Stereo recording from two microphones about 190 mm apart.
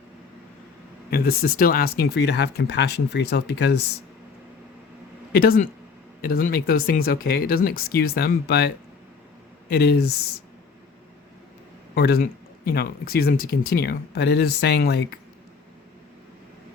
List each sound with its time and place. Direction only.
1.1 s speech: 55° left (ahead or behind)
5.3 s speech: 50° left (ahead or behind)
11.9 s speech: 55° left (ahead or behind)